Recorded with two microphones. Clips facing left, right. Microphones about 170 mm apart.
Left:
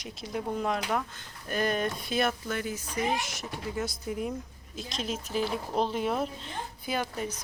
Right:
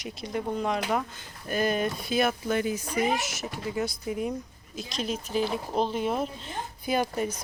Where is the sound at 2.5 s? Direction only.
20° right (ahead or behind).